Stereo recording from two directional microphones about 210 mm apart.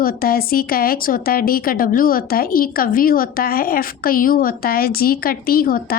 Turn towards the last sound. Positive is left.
turn(degrees=45)  # may be behind; listen again after turning